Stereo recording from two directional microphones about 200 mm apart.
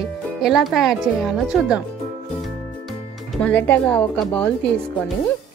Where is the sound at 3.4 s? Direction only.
10° left (ahead or behind).